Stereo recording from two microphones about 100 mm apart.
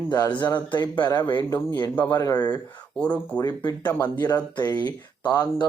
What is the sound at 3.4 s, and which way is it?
Speech, 40° left (ahead or behind).